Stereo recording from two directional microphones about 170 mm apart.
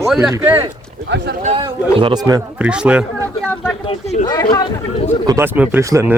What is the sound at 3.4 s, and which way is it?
Speech, 10° left (ahead or behind).